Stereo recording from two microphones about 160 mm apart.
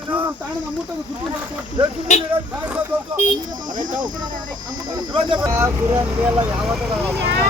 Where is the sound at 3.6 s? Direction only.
55° right (ahead or behind).